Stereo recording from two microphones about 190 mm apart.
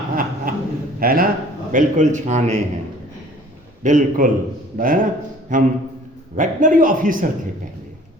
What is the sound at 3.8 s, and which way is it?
A man's voice, 40° right (ahead or behind).